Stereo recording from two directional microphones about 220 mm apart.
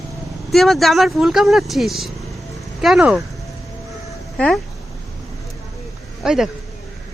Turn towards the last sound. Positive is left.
turn(degrees=0)  # may be behind; listen again after turning